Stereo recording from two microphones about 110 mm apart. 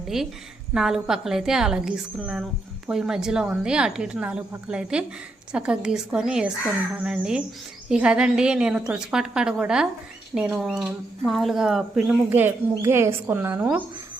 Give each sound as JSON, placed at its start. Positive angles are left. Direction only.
{"t": 0.1, "sound": "a woman's voice", "side_deg": -5}
{"t": 11.9, "sound": "speech", "side_deg": -20}